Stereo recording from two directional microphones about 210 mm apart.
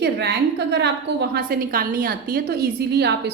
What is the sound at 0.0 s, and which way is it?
A woman's voice, 50° right (ahead or behind).